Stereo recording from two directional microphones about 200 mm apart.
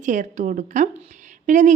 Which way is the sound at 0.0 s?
40° right (ahead or behind).